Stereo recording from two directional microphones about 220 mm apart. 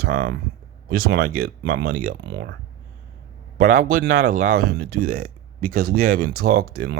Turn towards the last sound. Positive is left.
turn(degrees=-45)  # may be behind; listen again after turning